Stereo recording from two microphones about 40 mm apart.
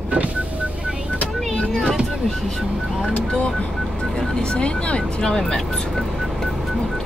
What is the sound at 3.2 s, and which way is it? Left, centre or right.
Speech, left.